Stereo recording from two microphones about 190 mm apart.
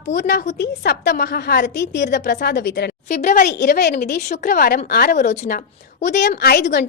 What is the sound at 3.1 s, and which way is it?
Speech, 40° left (ahead or behind).